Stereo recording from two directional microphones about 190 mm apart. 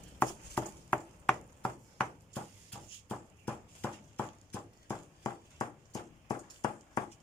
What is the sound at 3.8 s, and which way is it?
Horse, 10° left (ahead or behind).